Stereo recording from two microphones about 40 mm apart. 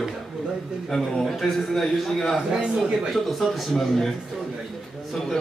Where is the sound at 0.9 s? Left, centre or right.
Centre.